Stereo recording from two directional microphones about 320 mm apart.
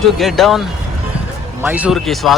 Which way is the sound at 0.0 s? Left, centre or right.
Centre.